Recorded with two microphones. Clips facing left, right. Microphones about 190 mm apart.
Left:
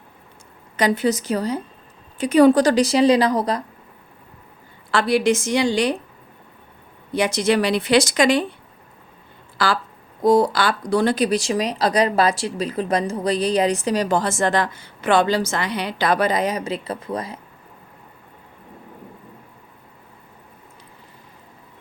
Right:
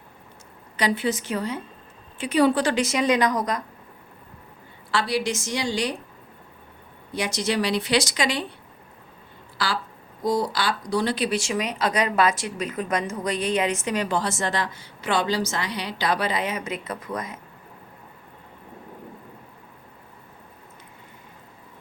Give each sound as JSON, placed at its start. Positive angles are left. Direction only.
{"t": 0.8, "sound": "speech", "side_deg": 45}
{"t": 4.9, "sound": "a woman's voice", "side_deg": 55}
{"t": 7.2, "sound": "a woman's voice", "side_deg": 55}
{"t": 9.6, "sound": "a woman's voice", "side_deg": 50}